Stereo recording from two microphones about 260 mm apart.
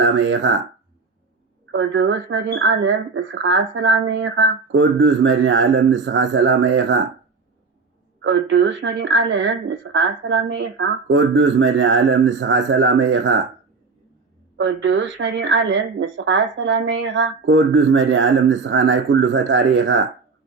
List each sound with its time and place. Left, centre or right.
0.0 s speech: right
1.7 s speech: right
8.2 s speech: right
14.6 s speech: right